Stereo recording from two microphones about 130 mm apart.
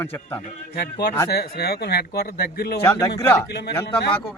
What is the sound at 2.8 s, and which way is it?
Speech, 25° left (ahead or behind).